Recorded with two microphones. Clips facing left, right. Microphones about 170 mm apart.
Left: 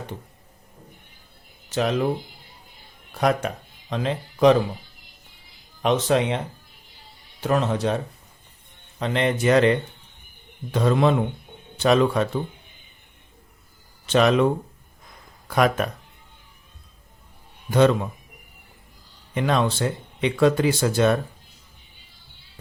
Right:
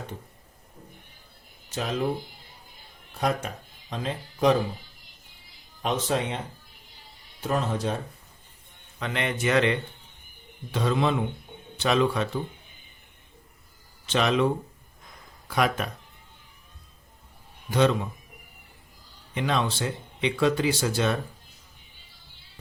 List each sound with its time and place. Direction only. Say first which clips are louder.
3.2 s speech: left 5 dB; 80° left
5.8 s speech: left 6 dB; 80° left
7.4 s speech: left 5 dB; 75° left (ahead or behind)
9.0 s speech: left 6 dB; 35° left (ahead or behind)
10.7 s speech: left 5 dB; 50° left (ahead or behind)
14.1 s speech: left 6 dB; 50° left (ahead or behind)
15.4 s speech: left 5 dB; 50° left (ahead or behind)
17.7 s speech: left 5 dB; 50° left (ahead or behind)
19.3 s speech: left 5 dB; 50° left (ahead or behind)